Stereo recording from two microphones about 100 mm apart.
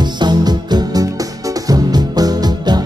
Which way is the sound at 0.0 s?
45° right (ahead or behind).